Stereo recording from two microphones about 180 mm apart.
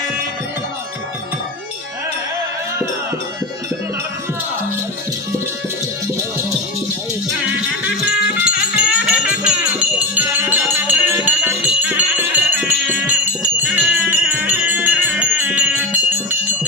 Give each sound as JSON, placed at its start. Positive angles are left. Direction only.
{"t": 8.4, "sound": "music", "side_deg": -5}